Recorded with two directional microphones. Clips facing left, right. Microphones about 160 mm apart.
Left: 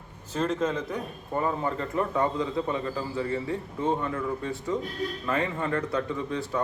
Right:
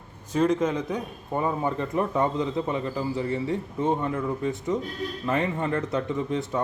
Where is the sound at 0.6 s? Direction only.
15° right (ahead or behind).